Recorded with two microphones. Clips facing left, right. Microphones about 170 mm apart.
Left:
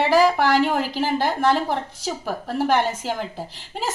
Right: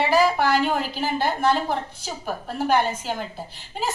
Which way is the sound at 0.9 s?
90° left.